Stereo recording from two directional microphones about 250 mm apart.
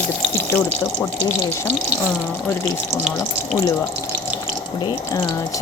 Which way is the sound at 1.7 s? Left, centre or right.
Centre.